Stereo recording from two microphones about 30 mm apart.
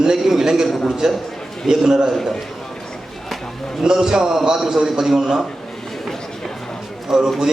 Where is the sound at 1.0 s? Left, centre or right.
Right.